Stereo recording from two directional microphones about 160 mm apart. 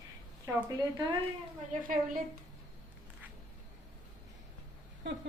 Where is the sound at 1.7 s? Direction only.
60° right (ahead or behind).